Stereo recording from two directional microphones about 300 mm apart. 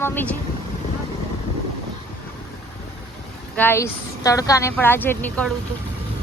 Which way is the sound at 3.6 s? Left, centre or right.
Centre.